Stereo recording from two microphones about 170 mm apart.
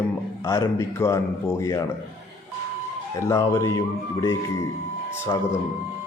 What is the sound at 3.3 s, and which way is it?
Speech, 20° left (ahead or behind).